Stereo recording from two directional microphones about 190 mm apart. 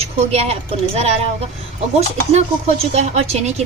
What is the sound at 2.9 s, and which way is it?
Speech, 35° right (ahead or behind).